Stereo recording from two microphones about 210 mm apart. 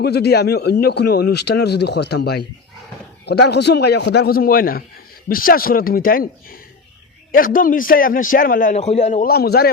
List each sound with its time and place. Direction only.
0.0 s a man's voice: 50° left (ahead or behind)
3.5 s a man's voice: 50° left (ahead or behind)